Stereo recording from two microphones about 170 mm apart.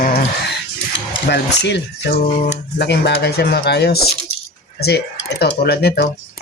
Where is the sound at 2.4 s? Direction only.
85° left.